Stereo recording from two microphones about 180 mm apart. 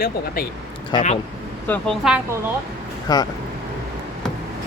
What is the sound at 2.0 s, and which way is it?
Speech, 10° right (ahead or behind).